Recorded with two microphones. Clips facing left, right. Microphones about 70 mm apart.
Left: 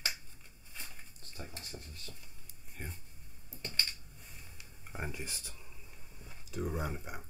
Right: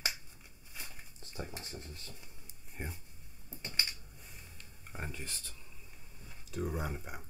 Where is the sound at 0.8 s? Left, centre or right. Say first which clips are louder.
Even; centre.